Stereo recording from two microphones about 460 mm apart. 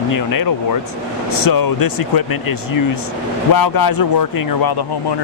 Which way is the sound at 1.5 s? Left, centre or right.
Left.